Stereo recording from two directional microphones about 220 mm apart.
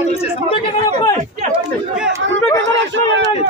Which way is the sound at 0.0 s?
30° left (ahead or behind).